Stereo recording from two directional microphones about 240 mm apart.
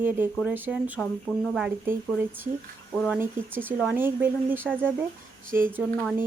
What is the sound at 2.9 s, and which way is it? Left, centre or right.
Speech, centre.